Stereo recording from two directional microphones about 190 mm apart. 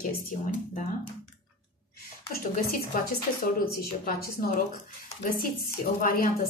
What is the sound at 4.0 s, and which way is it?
Speech, 50° left (ahead or behind).